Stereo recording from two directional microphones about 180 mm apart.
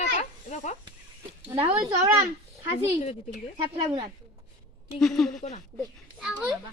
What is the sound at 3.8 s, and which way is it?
Speech, 20° right (ahead or behind).